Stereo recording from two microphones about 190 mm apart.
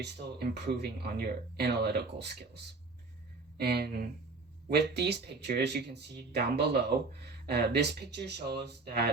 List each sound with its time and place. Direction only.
0.0 s speech: 60° right (ahead or behind)
3.6 s speech: 55° right (ahead or behind)